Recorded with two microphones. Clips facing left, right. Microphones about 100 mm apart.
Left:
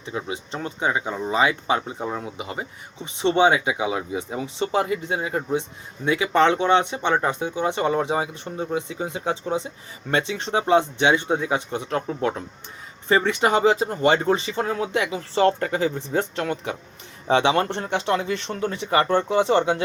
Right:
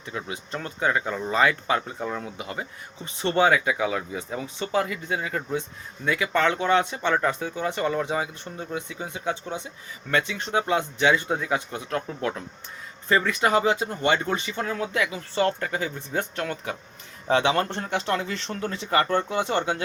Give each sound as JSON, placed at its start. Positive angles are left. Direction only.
{"t": 0.0, "sound": "speech", "side_deg": 20}